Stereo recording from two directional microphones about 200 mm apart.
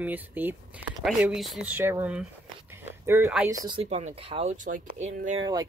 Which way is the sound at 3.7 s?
30° right (ahead or behind).